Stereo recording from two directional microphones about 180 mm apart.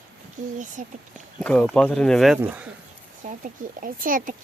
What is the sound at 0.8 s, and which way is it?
Speech, 45° right (ahead or behind).